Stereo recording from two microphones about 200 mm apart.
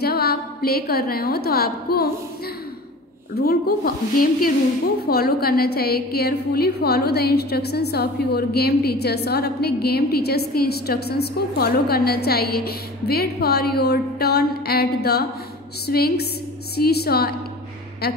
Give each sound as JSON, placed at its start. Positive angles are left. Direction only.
{"t": 0.0, "sound": "a woman's voice", "side_deg": 50}
{"t": 3.3, "sound": "a woman's voice", "side_deg": 50}